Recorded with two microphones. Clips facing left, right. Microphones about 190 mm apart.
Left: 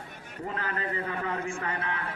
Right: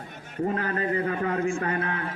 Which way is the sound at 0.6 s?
25° right (ahead or behind).